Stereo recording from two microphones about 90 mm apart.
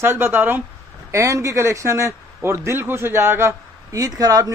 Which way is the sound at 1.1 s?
35° right (ahead or behind).